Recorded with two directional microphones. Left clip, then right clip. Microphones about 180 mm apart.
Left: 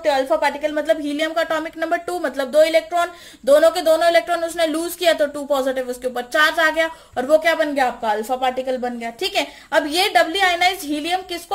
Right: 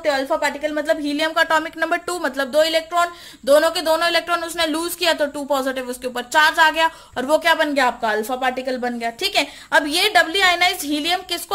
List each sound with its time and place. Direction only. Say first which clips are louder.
0.0 s a woman's voice: left 2 dB; 30° right (ahead or behind)